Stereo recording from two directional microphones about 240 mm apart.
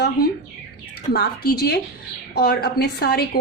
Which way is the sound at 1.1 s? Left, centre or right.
Left.